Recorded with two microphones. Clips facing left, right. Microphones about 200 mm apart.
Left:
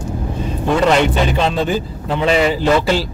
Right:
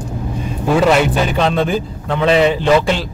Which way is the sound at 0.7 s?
5° right (ahead or behind).